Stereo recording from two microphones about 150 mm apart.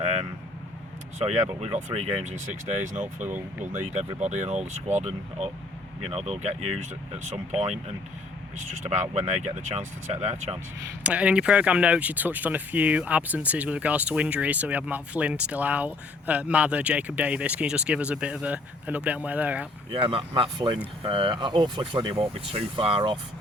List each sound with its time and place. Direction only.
1.2 s speech: 45° right (ahead or behind)
3.2 s speech: 10° right (ahead or behind)
3.9 s speech: 50° right (ahead or behind)
8.5 s speech: 55° right (ahead or behind)
11.0 s speech: 10° right (ahead or behind)
19.9 s speech: 35° right (ahead or behind)